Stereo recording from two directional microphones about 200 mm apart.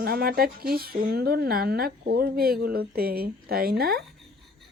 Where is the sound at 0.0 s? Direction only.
50° right (ahead or behind).